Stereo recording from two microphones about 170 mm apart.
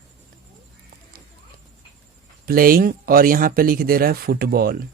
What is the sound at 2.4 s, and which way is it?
Speech, 60° right (ahead or behind).